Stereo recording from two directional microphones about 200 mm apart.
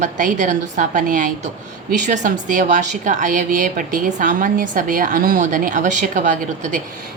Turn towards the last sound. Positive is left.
turn(degrees=-40)  # may be behind; listen again after turning